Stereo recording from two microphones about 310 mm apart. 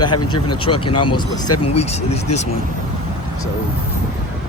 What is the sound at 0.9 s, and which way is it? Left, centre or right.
Speech, left.